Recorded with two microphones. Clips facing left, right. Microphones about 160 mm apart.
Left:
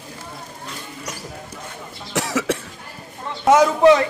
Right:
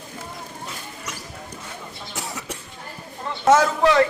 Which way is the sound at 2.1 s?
90° left.